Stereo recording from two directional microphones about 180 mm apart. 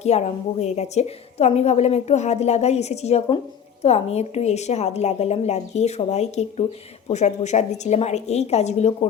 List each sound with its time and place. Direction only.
0.0 s a woman's voice: 35° left (ahead or behind)